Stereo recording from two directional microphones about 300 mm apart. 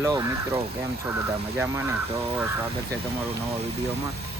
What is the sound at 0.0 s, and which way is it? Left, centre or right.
Speech, centre.